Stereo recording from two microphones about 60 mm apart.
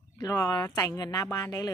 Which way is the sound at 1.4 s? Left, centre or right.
Left.